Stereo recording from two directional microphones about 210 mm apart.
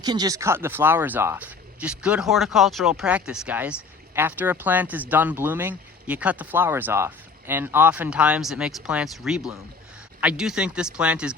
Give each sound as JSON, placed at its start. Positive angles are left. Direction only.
{"t": 0.0, "sound": "speech", "side_deg": -20}